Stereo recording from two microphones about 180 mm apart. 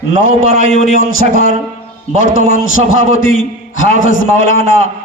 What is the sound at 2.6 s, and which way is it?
A man's voice, 90° left.